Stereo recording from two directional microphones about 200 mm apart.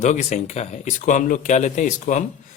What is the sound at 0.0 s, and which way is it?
Speech, 35° left (ahead or behind).